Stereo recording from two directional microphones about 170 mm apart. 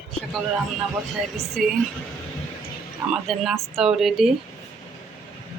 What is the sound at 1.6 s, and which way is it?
Speech, 5° right (ahead or behind).